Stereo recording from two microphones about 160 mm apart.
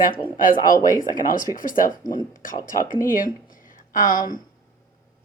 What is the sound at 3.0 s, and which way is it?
A woman's voice, 60° left (ahead or behind).